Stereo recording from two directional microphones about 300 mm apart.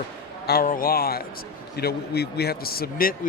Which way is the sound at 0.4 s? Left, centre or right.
Left.